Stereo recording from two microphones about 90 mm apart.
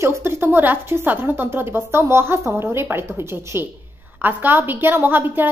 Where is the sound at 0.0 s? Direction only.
30° right (ahead or behind).